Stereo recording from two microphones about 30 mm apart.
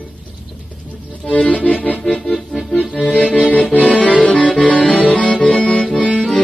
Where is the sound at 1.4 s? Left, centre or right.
Left.